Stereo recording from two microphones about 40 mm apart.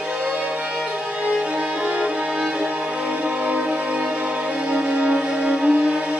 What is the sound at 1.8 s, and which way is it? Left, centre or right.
Music, right.